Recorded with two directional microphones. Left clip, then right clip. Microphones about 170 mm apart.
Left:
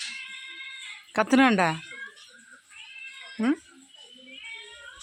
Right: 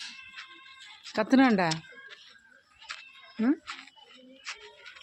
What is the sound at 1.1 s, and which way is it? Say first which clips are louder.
Speech: left 3 dB; 5° left (ahead or behind).